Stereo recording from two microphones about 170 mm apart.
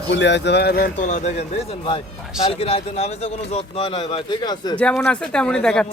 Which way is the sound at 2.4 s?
35° left (ahead or behind).